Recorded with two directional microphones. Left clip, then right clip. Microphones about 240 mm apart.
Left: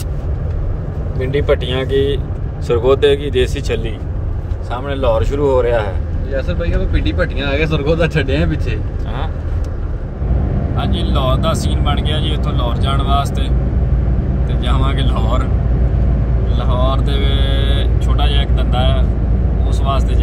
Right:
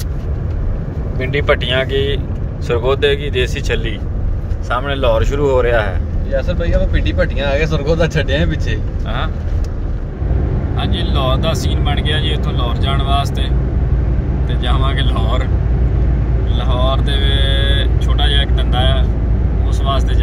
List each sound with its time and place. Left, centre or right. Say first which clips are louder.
1.2 s speech: right 1 dB; centre
6.3 s speech: right 3 dB; left
10.8 s speech: even; centre
14.6 s speech: right 1 dB; centre
16.5 s speech: even; centre